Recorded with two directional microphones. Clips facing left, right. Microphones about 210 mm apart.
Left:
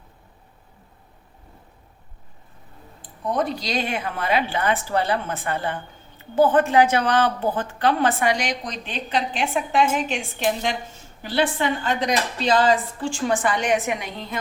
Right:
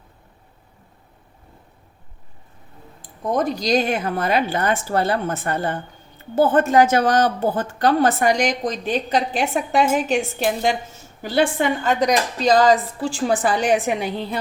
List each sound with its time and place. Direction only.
3.3 s a woman's voice: 45° right (ahead or behind)